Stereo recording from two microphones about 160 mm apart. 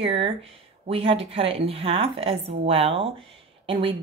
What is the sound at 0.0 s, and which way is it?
A woman's voice, 40° right (ahead or behind).